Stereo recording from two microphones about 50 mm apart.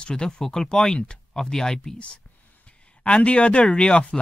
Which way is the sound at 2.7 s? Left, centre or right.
Left.